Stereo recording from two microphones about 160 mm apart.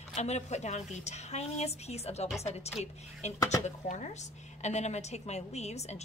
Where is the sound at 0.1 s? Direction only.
45° left (ahead or behind).